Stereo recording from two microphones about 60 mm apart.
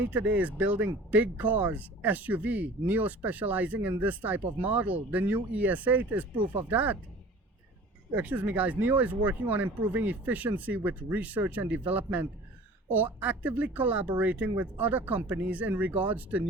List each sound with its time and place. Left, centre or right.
0.1 s speech: right
8.1 s speech: right